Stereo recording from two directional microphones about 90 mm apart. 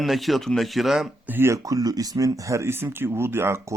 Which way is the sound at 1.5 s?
40° right (ahead or behind).